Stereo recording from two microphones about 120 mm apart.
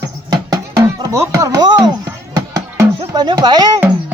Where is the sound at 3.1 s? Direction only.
35° right (ahead or behind).